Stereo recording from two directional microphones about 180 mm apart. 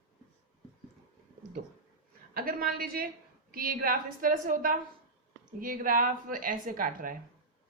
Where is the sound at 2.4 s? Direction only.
55° right (ahead or behind).